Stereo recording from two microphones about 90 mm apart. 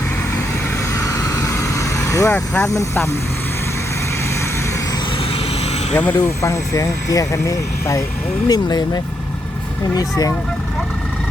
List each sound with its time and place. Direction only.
1.7 s vehicle: 35° left (ahead or behind)
2.3 s speech: 15° left (ahead or behind)
2.6 s speech: 35° left (ahead or behind)
5.9 s speech: 20° left (ahead or behind)
6.4 s speech: 35° left (ahead or behind)
8.4 s speech: 50° left (ahead or behind)